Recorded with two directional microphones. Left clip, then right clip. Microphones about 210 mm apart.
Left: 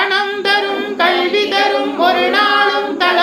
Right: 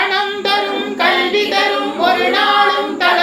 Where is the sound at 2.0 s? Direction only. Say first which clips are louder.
Left 1 dB; 20° left (ahead or behind).